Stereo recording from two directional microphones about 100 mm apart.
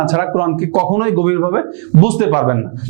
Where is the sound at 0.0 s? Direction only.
20° right (ahead or behind).